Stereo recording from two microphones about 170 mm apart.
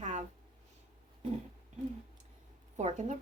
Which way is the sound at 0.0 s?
45° right (ahead or behind).